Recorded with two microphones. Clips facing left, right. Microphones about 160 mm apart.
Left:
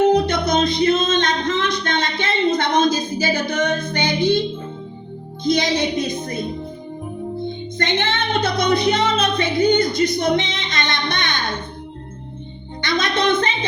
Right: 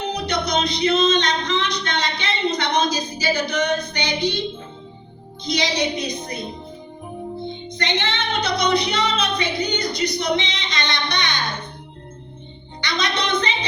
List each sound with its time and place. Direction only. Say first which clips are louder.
0.0 s music: left 9 dB; 50° left (ahead or behind)
5.4 s a woman's voice: left 4 dB; 50° left (ahead or behind)
7.4 s music: left 3 dB; 50° left (ahead or behind)
12.8 s music: left 5 dB; 50° left (ahead or behind)